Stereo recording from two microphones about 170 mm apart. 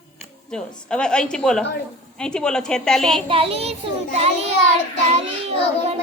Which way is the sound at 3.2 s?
35° right (ahead or behind).